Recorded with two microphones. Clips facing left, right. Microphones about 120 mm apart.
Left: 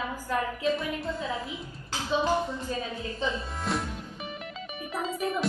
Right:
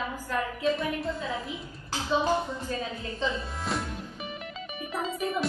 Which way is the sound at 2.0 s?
15° left (ahead or behind).